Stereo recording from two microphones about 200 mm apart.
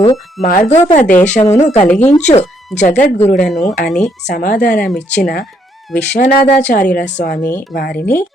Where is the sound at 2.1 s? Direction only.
35° left (ahead or behind).